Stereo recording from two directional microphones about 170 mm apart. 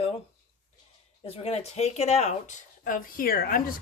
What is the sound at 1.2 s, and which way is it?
Speech, 35° left (ahead or behind).